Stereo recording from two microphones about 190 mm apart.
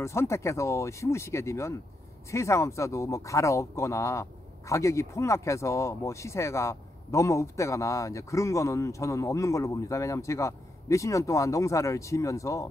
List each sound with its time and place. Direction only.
0.0 s speech: 15° left (ahead or behind)